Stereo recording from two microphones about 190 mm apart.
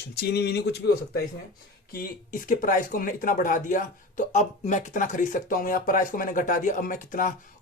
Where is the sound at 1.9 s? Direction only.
45° left (ahead or behind).